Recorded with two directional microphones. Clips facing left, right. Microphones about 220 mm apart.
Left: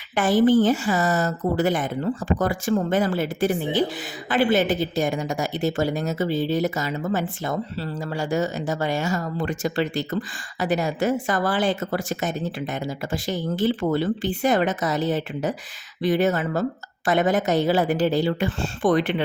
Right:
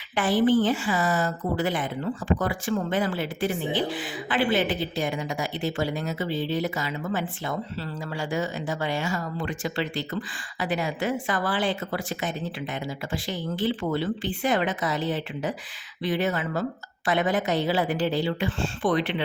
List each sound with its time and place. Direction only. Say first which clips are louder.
0.2 s speech: left 4 dB; 45° left (ahead or behind)